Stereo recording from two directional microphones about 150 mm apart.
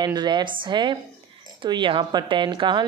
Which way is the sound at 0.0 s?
30° right (ahead or behind).